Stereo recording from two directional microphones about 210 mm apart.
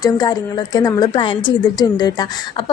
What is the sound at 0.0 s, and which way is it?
A woman's voice, 20° left (ahead or behind).